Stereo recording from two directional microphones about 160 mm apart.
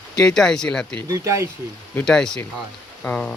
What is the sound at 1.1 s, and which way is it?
Speech, 20° right (ahead or behind).